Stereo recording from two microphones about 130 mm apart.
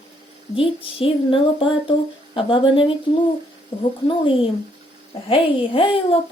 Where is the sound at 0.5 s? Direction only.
45° left (ahead or behind).